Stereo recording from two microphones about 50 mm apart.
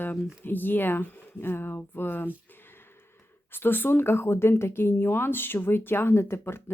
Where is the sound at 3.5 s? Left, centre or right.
Left.